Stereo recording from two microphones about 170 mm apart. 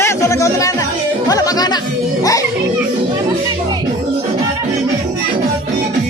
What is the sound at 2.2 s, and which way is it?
Children playing, 20° left (ahead or behind).